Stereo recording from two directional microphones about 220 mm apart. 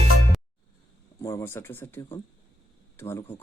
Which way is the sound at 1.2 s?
15° left (ahead or behind).